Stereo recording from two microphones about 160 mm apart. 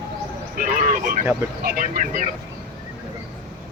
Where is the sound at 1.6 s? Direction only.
60° right (ahead or behind).